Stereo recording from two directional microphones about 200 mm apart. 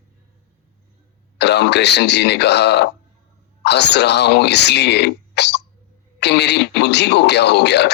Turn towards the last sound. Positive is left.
turn(degrees=60)  # may be behind; listen again after turning